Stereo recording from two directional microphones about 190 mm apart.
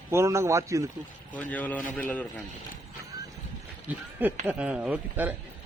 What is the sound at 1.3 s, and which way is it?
Speech, 10° left (ahead or behind).